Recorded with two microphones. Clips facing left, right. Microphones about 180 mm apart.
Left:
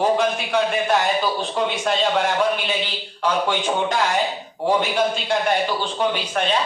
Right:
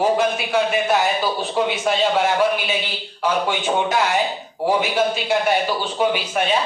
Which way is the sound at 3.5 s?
5° right (ahead or behind).